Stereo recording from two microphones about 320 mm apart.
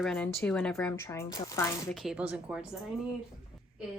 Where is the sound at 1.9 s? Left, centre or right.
Centre.